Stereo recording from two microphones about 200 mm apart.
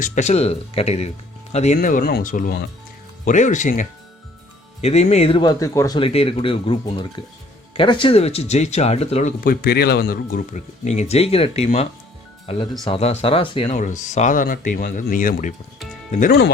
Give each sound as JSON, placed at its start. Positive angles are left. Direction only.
{"t": 0.0, "sound": "speech", "side_deg": 35}
{"t": 9.4, "sound": "speech", "side_deg": 50}
{"t": 13.7, "sound": "speech", "side_deg": 40}